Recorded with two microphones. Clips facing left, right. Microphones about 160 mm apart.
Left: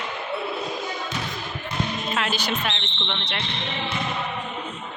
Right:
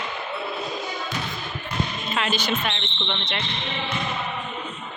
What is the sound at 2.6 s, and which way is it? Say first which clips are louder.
Speech: right 1 dB; centre (ahead or behind).